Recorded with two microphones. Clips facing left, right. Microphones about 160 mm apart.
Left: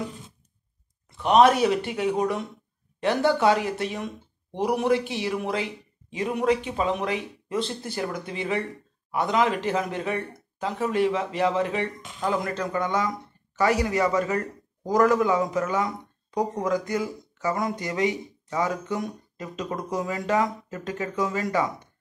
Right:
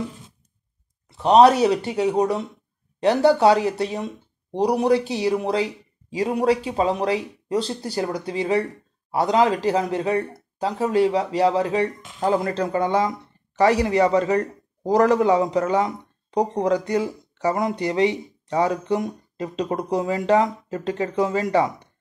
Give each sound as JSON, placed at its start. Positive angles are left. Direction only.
{"t": 1.1, "sound": "a man's voice", "side_deg": -35}